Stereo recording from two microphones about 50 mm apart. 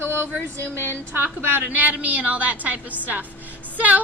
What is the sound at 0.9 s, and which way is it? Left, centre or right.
Speech, right.